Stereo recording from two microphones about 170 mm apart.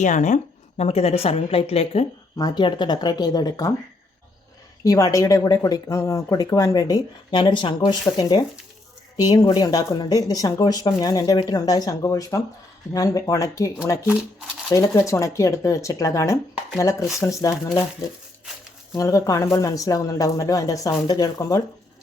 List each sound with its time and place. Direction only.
0.0 s a woman's voice: 45° left (ahead or behind); by 3.7 s 25° left (ahead or behind)
4.8 s speech: 20° left (ahead or behind)
14.7 s speech: 20° left (ahead or behind)
18.9 s speech: 20° left (ahead or behind)